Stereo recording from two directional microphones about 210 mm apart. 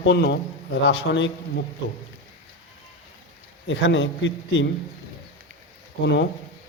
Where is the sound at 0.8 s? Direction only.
65° left (ahead or behind).